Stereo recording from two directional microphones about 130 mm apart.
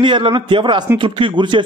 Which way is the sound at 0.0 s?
35° right (ahead or behind).